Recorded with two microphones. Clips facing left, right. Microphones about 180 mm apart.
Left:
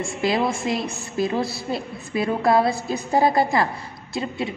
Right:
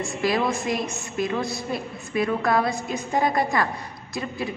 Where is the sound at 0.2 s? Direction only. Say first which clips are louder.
Left 2 dB; 25° left (ahead or behind).